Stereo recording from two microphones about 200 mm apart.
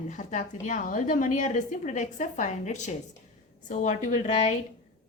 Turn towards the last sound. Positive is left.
turn(degrees=35)  # may be behind; listen again after turning